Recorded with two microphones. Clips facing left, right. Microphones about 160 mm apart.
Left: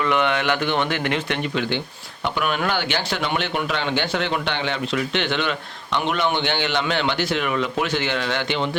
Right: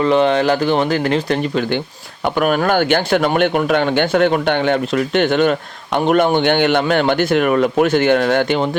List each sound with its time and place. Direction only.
0.0 s speech: 35° right (ahead or behind)